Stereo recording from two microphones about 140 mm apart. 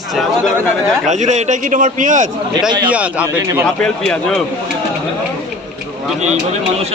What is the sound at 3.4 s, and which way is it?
Speech, 20° right (ahead or behind).